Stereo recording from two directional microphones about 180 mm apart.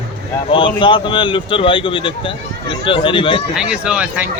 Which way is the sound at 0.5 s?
30° left (ahead or behind).